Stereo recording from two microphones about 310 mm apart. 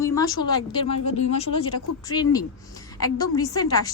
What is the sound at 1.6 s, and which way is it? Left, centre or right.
Speech, left.